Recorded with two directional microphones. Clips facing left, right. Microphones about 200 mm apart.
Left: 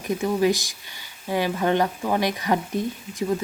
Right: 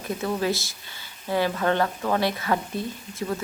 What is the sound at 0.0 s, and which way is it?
Speech, 15° left (ahead or behind).